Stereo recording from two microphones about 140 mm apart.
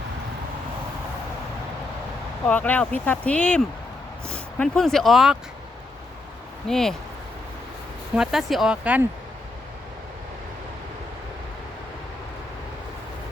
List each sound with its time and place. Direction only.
2.5 s speech: 10° left (ahead or behind)
6.7 s speech: 5° left (ahead or behind)
8.1 s speech: 5° right (ahead or behind)